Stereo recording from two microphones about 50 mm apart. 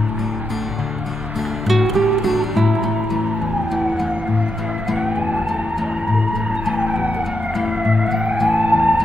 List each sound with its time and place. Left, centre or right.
1.7 s music: centre
6.8 s emergency vehicle: right
8.5 s theremin: right